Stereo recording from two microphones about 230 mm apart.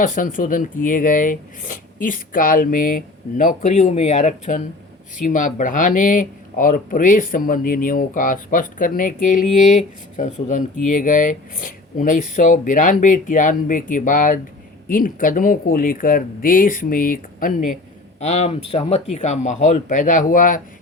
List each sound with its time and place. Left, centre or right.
0.0 s speech: left